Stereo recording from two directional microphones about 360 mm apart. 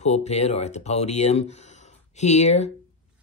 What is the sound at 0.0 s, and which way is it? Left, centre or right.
Speech, centre.